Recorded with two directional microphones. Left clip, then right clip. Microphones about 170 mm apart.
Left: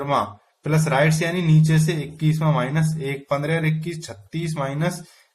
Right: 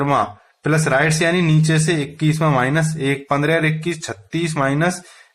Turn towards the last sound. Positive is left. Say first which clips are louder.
# right 7 dB
turn(degrees=-40)  # may be behind; listen again after turning